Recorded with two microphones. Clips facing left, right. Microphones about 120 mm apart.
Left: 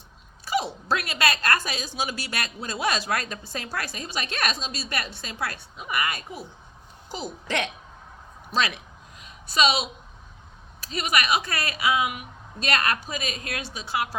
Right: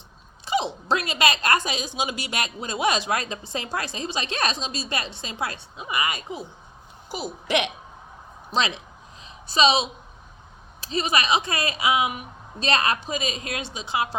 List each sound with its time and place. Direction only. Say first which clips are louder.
0.4 s a woman's voice: right 2 dB; 20° right (ahead or behind)